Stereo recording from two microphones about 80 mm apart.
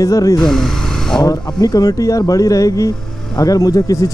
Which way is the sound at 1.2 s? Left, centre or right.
Left.